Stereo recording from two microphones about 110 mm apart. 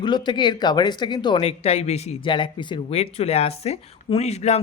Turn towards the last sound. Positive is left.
turn(degrees=80)